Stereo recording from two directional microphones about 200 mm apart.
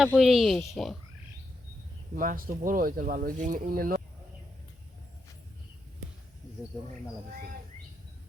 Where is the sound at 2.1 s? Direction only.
45° right (ahead or behind).